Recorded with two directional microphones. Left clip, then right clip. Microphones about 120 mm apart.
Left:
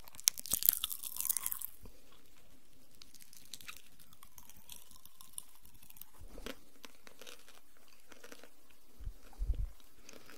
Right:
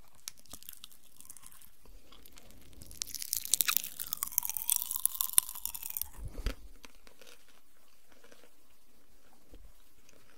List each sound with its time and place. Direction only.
0.1 s crunch: 25° left (ahead or behind)
3.0 s chewing: 30° right (ahead or behind)
6.0 s biting: 25° right (ahead or behind)
6.3 s biting: 10° right (ahead or behind)
7.1 s crunch: 10° left (ahead or behind)
8.1 s chewing: 30° left (ahead or behind)